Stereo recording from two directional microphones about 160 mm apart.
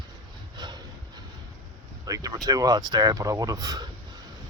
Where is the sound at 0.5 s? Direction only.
25° right (ahead or behind).